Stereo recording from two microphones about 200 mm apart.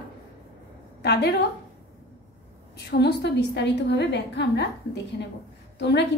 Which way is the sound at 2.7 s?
55° left (ahead or behind).